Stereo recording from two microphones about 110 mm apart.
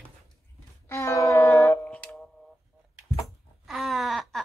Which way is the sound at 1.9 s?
5° left (ahead or behind).